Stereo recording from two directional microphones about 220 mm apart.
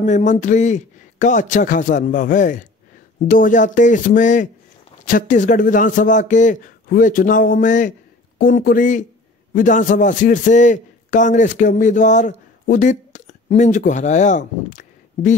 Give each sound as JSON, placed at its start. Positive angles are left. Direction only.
{"t": 0.0, "sound": "a man's voice", "side_deg": 35}